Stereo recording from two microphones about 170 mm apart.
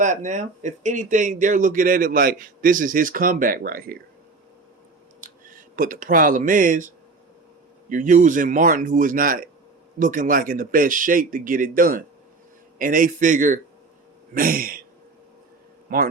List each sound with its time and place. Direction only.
0.0 s speech: 45° right (ahead or behind)
5.2 s speech: 50° right (ahead or behind)
15.9 s speech: 55° right (ahead or behind)